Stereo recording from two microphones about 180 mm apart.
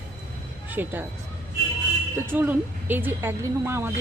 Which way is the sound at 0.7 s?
10° right (ahead or behind).